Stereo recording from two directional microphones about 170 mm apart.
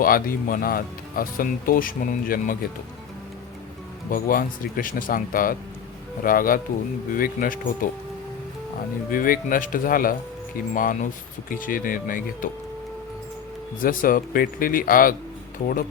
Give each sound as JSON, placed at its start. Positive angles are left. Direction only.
{"t": 0.0, "sound": "speech", "side_deg": 55}
{"t": 4.1, "sound": "speech", "side_deg": 55}
{"t": 9.0, "sound": "speech", "side_deg": 55}
{"t": 13.8, "sound": "speech", "side_deg": 55}